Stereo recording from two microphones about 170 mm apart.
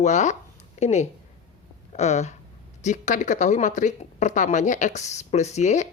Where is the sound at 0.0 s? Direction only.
45° left (ahead or behind).